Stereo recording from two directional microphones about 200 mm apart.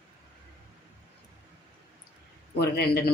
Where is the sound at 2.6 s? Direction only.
55° left (ahead or behind).